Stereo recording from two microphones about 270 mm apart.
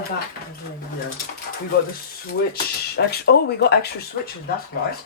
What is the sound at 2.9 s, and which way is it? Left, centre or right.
Speech, left.